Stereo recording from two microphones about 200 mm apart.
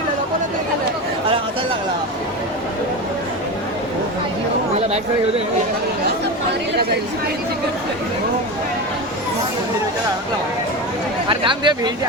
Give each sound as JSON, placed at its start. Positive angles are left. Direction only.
{"t": 11.3, "sound": "speech", "side_deg": -25}